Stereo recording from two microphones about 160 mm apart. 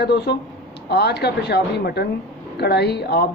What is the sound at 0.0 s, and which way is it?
A woman's voice, 90° left.